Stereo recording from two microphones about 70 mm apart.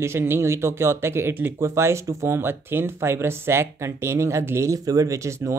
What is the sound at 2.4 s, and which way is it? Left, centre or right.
Speech, right.